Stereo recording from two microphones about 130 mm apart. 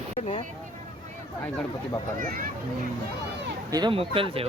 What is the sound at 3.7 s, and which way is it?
Speech, 35° right (ahead or behind).